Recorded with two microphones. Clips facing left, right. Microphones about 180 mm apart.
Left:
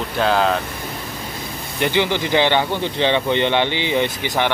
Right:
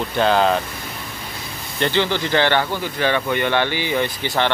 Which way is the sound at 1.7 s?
15° left (ahead or behind).